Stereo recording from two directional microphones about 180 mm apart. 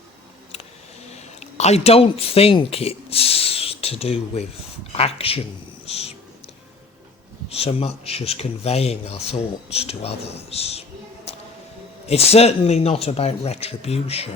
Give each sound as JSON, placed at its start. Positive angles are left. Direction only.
{"t": 1.1, "sound": "speech", "side_deg": 35}
{"t": 5.8, "sound": "a sound", "side_deg": 35}
{"t": 7.5, "sound": "speech", "side_deg": 35}
{"t": 12.0, "sound": "speech", "side_deg": 35}